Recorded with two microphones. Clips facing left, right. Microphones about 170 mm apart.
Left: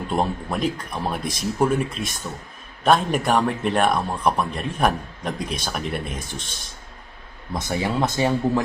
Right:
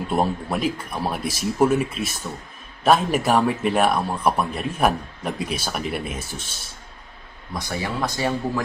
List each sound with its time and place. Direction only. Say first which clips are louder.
0.1 s speech: right 1 dB; 5° right (ahead or behind)
7.5 s speech: left 4 dB; 25° left (ahead or behind)